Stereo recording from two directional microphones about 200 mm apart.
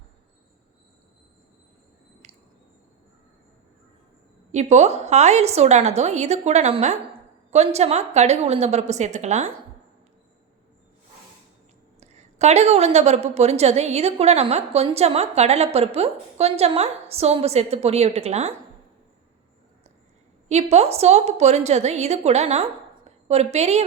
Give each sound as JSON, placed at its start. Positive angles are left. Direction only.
{"t": 2.2, "sound": "squish", "side_deg": -35}
{"t": 4.5, "sound": "a woman's voice", "side_deg": -35}
{"t": 11.9, "sound": "a woman's voice", "side_deg": -35}
{"t": 20.5, "sound": "a woman's voice", "side_deg": -35}